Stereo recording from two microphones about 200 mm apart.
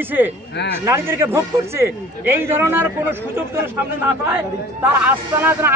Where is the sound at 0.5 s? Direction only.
60° left (ahead or behind).